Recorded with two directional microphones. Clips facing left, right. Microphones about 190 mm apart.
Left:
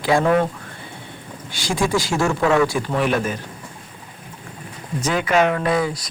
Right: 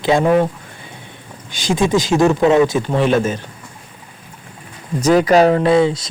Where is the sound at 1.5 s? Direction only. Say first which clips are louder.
Right 5 dB; 20° right (ahead or behind).